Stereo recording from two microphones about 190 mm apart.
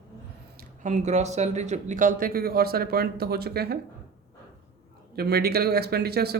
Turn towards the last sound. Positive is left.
turn(degrees=-55)  # may be behind; listen again after turning